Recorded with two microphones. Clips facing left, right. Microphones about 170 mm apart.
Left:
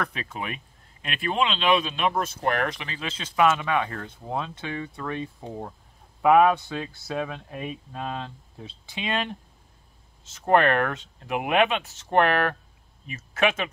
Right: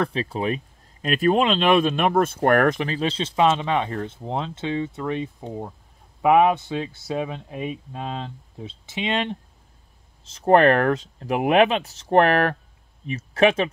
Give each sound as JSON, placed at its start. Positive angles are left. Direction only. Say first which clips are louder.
{"t": 0.0, "sound": "speech", "louder": "right 8 dB", "side_deg": -30}
{"t": 10.2, "sound": "speech", "louder": "right 5 dB", "side_deg": -35}